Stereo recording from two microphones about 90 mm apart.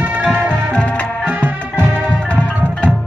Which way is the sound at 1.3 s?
20° right (ahead or behind).